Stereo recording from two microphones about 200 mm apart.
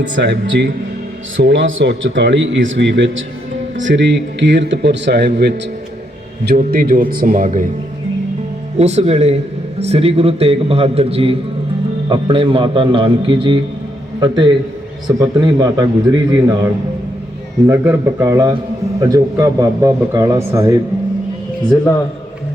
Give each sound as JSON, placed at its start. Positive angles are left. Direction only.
{"t": 0.2, "sound": "a man's voice", "side_deg": -60}
{"t": 8.8, "sound": "a man's voice", "side_deg": -35}
{"t": 17.7, "sound": "a man's voice", "side_deg": -15}